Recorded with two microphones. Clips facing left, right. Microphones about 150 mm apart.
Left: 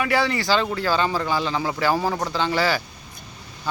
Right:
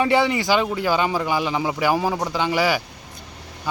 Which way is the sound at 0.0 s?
20° right (ahead or behind).